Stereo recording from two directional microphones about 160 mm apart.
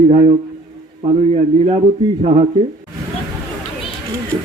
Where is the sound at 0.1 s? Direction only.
45° right (ahead or behind).